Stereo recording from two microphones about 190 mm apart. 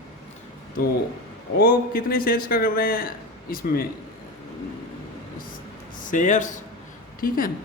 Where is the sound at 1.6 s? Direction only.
50° left (ahead or behind).